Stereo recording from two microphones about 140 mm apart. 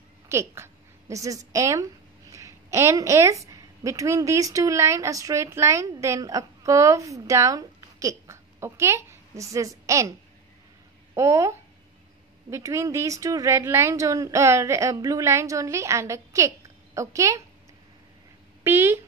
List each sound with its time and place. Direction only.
0.3 s a woman's voice: 20° right (ahead or behind)
11.1 s a woman's voice: 20° right (ahead or behind)
18.6 s speech: 15° right (ahead or behind)